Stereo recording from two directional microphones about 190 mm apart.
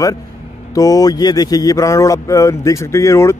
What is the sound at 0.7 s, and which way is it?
A man's voice, 20° left (ahead or behind).